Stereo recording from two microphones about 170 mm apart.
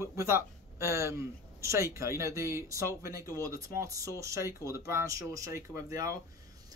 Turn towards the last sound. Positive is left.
turn(degrees=-20)  # may be behind; listen again after turning